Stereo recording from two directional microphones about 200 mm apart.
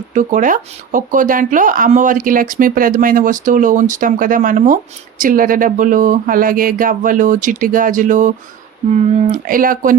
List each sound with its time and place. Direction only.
0.1 s speech: 40° right (ahead or behind)